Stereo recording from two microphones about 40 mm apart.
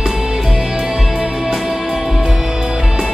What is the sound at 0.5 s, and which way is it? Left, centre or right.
Music, centre.